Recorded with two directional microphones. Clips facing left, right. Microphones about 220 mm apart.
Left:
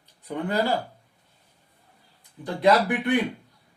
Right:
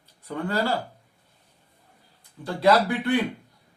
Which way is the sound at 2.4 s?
20° left (ahead or behind).